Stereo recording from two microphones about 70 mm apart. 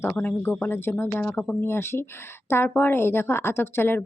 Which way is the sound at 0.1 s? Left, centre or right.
Left.